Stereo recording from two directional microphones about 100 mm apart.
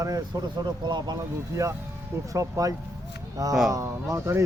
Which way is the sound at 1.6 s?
30° right (ahead or behind).